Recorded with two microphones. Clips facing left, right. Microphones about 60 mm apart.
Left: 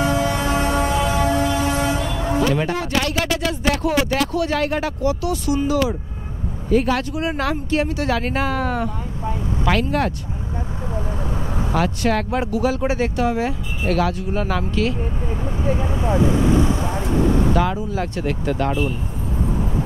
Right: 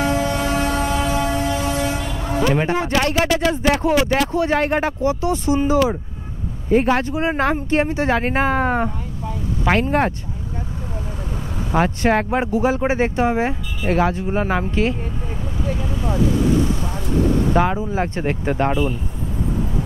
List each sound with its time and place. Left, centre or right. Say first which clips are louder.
0.0 s train: even; left
2.4 s speech: right 5 dB; right
11.7 s speech: right 3 dB; right
15.6 s vehicle: left 3 dB; left
17.5 s speech: right 2 dB; right